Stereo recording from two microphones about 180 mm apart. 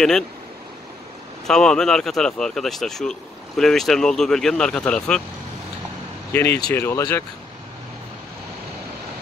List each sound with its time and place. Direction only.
1.5 s speech: 5° left (ahead or behind)
6.3 s speech: 10° left (ahead or behind)